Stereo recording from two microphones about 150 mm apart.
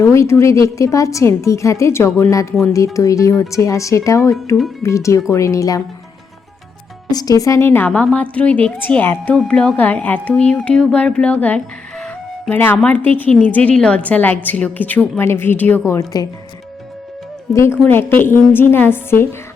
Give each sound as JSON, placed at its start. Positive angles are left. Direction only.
{"t": 0.0, "sound": "a woman's voice", "side_deg": 20}
{"t": 7.1, "sound": "a woman's voice", "side_deg": 25}
{"t": 17.5, "sound": "a woman's voice", "side_deg": 20}